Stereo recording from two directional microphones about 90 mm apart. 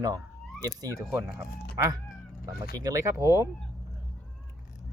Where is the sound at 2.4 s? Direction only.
40° right (ahead or behind).